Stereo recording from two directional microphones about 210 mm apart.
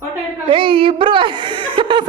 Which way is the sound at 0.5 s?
25° right (ahead or behind).